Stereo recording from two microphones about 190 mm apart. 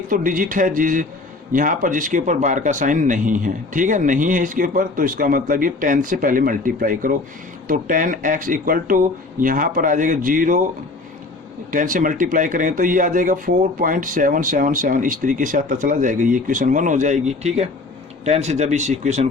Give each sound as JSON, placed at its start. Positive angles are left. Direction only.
{"t": 0.1, "sound": "speech", "side_deg": -45}
{"t": 11.7, "sound": "speech", "side_deg": -45}